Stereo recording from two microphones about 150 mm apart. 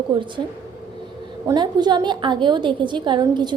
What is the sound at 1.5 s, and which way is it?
A woman's voice, 30° right (ahead or behind).